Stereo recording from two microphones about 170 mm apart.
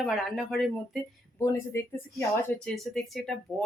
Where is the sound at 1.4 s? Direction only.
15° left (ahead or behind).